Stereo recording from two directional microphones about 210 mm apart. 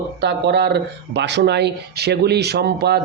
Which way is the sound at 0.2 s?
55° right (ahead or behind).